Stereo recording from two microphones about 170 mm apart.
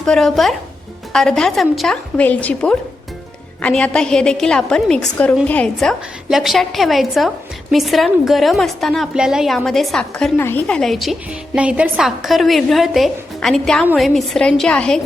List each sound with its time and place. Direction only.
0.0 s a woman's voice: centre (ahead or behind)